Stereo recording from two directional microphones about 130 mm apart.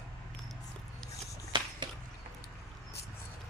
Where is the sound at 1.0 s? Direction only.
5° left (ahead or behind).